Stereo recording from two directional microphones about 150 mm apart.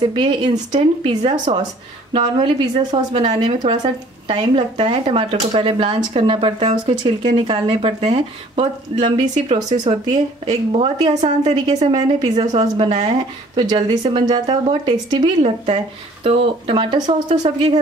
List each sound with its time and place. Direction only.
0.1 s a woman's voice: 30° right (ahead or behind)
11.6 s a woman's voice: 30° right (ahead or behind)
12.5 s a woman's voice: 40° right (ahead or behind)
13.6 s a woman's voice: 30° right (ahead or behind)
15.4 s a woman's voice: 40° right (ahead or behind)